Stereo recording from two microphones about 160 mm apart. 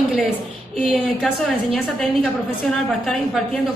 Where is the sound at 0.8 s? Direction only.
Centre (ahead or behind).